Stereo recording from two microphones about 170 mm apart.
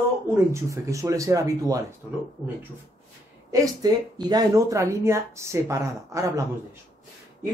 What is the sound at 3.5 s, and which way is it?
Speech, 20° right (ahead or behind).